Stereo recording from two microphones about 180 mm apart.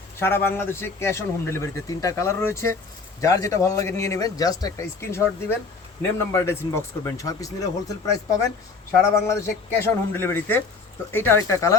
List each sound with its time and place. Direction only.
0.2 s a man's voice: 15° left (ahead or behind)
9.1 s a man's voice: 15° left (ahead or behind)